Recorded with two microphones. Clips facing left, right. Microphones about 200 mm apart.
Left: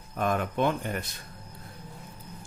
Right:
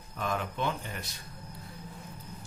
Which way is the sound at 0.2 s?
55° left (ahead or behind).